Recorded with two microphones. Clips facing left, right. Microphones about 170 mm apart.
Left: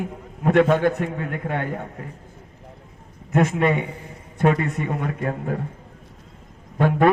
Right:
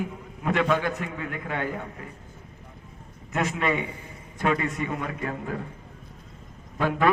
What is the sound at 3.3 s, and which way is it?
A man's voice, 55° left (ahead or behind).